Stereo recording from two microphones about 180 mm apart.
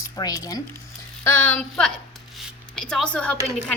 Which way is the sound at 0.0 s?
20° left (ahead or behind).